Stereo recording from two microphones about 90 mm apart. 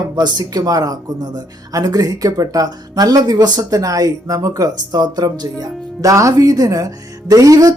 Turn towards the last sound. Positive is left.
turn(degrees=-40)  # may be behind; listen again after turning